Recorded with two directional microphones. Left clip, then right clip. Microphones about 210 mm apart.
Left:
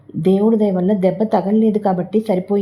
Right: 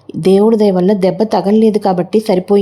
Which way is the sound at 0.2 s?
25° right (ahead or behind).